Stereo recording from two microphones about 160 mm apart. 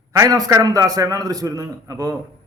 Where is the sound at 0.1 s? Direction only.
20° right (ahead or behind).